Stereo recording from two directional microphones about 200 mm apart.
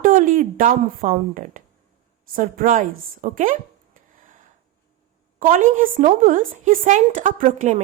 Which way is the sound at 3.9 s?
40° right (ahead or behind).